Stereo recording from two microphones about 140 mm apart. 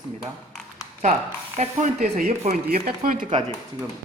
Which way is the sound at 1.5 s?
60° right (ahead or behind).